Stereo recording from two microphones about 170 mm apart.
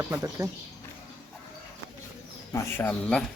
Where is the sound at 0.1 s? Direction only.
20° right (ahead or behind).